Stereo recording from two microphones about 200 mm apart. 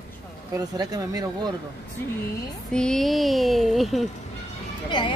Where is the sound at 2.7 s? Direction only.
5° left (ahead or behind).